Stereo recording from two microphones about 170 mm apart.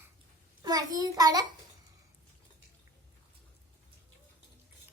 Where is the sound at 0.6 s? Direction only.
25° right (ahead or behind).